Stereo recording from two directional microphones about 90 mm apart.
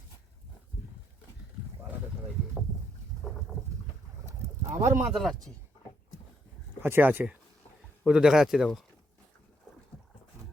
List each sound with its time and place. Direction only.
4.7 s speech: 30° right (ahead or behind)
5.1 s speech: centre (ahead or behind)
6.8 s speech: 25° right (ahead or behind)
8.0 s speech: 5° right (ahead or behind)